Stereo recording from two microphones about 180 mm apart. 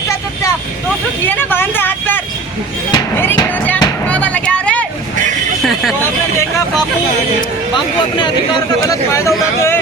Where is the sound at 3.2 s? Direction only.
10° left (ahead or behind).